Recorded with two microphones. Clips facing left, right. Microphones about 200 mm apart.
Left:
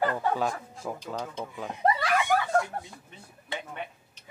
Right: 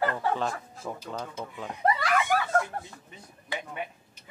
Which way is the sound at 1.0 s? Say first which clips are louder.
Left 1 dB; 5° right (ahead or behind).